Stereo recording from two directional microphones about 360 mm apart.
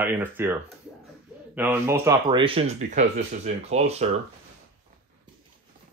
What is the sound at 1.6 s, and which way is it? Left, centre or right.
Speech, centre.